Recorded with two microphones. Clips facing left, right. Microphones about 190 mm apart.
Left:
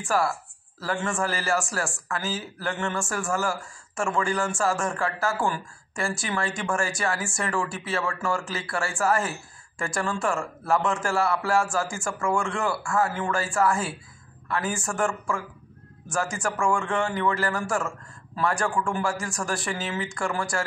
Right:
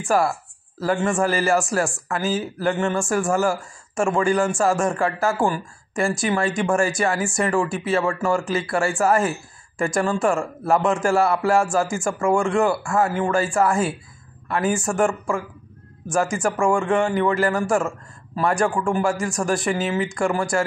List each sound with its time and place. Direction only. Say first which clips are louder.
0.0 s a man's voice: right 5 dB; 20° right (ahead or behind)